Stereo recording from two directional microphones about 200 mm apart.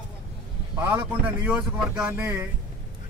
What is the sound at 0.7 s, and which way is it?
A man's voice, 10° right (ahead or behind).